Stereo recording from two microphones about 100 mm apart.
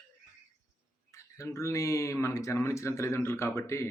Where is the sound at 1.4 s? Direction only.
30° left (ahead or behind).